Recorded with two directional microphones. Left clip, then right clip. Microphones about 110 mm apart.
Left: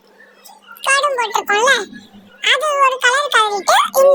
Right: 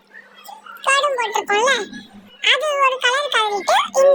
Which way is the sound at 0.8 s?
35° left (ahead or behind).